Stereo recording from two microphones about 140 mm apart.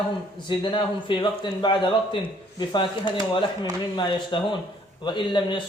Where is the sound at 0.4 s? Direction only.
35° left (ahead or behind).